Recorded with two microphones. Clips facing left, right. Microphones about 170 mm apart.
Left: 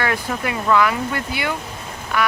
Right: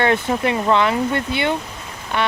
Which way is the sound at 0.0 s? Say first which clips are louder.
Right 5 dB; 25° right (ahead or behind).